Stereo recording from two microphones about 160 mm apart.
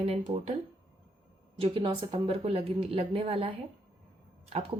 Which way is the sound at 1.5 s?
35° right (ahead or behind).